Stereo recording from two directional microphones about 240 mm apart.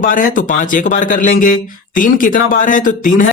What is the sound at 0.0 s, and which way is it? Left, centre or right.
Speech, left.